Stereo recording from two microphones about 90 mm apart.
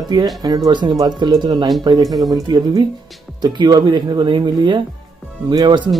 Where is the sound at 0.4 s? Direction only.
50° right (ahead or behind).